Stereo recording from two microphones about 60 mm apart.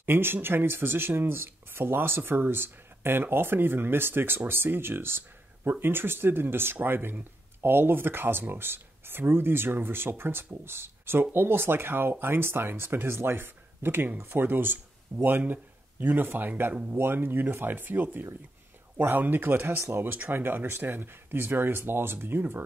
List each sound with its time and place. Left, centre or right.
0.0 s speech: right